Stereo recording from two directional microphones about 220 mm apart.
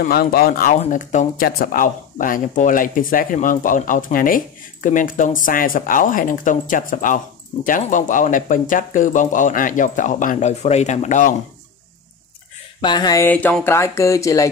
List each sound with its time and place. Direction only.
0.0 s speech: 40° left (ahead or behind)
12.8 s speech: 20° left (ahead or behind)